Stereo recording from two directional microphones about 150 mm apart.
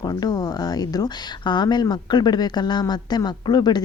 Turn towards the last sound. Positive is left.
turn(degrees=30)  # may be behind; listen again after turning